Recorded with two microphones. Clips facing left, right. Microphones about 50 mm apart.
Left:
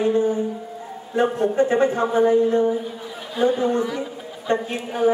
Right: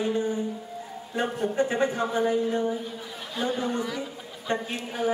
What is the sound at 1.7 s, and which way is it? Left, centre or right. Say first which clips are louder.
A woman's voice: left 7 dB; left.